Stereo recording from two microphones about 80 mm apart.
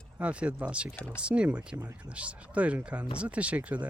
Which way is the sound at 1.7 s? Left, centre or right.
Right.